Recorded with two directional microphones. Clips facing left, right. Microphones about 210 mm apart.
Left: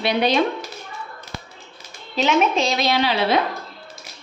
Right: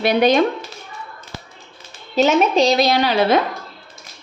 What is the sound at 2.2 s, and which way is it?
Speech, 40° right (ahead or behind).